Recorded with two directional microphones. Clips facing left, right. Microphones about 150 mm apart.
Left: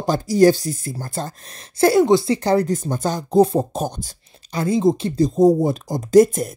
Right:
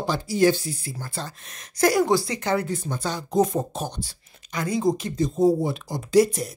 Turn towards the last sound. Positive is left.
turn(degrees=50)  # may be behind; listen again after turning